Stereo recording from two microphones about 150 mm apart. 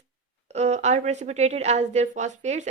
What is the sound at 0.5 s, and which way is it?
A woman's voice, 50° right (ahead or behind).